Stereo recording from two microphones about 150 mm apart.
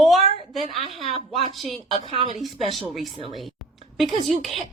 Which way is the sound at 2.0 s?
35° right (ahead or behind).